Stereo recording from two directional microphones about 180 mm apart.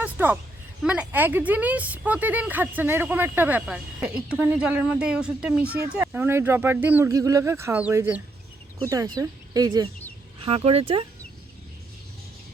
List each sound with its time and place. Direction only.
0.0 s a sound: 10° right (ahead or behind)
0.9 s speech: 10° right (ahead or behind)
10.4 s speech: 35° right (ahead or behind)